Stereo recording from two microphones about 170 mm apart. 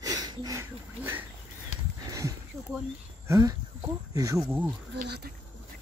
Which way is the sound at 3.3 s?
20° right (ahead or behind).